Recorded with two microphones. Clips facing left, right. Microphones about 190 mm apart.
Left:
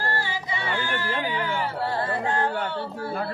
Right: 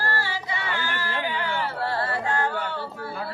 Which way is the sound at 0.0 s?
20° left (ahead or behind).